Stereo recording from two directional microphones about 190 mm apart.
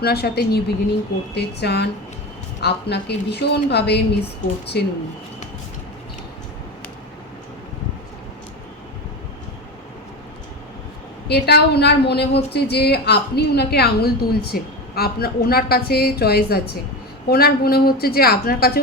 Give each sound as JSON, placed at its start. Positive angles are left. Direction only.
{"t": 0.0, "sound": "a woman's voice", "side_deg": 55}
{"t": 11.3, "sound": "a woman's voice", "side_deg": 60}